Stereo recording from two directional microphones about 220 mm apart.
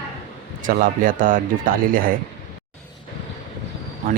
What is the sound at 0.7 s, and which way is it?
Speech, 40° right (ahead or behind).